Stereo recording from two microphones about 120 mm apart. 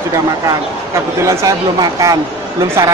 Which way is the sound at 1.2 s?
25° right (ahead or behind).